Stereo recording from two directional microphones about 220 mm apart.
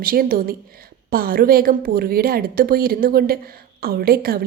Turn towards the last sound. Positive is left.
turn(degrees=-45)  # may be behind; listen again after turning